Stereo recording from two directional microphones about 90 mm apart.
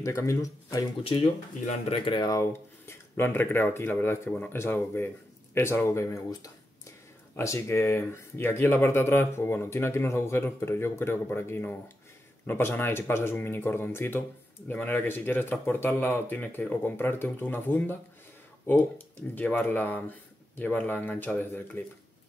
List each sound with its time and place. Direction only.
0.0 s speech: 35° left (ahead or behind)
1.0 s speech: 75° left (ahead or behind)
2.4 s speech: 30° left (ahead or behind)